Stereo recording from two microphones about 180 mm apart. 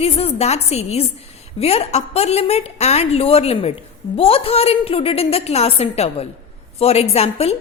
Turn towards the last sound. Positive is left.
turn(degrees=35)  # may be behind; listen again after turning